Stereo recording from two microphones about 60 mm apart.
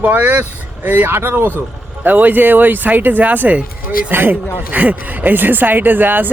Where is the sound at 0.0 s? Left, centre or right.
Right.